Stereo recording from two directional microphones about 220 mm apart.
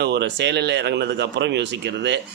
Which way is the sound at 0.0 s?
50° right (ahead or behind).